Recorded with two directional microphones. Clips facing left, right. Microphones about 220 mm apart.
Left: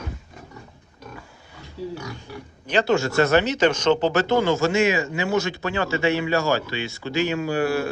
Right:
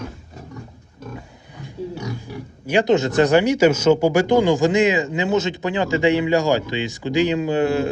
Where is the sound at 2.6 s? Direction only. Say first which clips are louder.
Right 4 dB; 15° right (ahead or behind).